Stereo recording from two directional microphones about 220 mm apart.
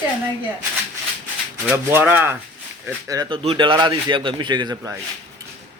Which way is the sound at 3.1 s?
20° right (ahead or behind).